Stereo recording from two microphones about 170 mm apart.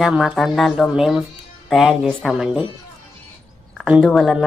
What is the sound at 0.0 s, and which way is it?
Speech, centre (ahead or behind).